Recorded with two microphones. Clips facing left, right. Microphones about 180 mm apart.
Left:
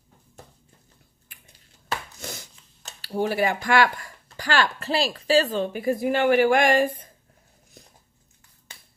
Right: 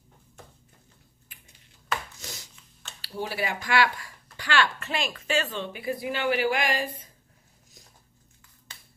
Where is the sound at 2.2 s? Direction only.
55° left (ahead or behind).